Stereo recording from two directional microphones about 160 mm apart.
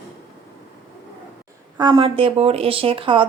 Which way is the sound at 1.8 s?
30° right (ahead or behind).